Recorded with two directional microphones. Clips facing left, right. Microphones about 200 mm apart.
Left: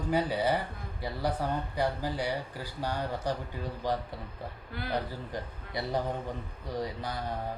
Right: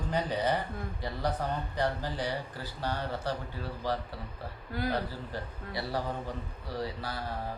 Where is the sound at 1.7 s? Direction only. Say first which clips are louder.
Left 1 dB; 10° left (ahead or behind).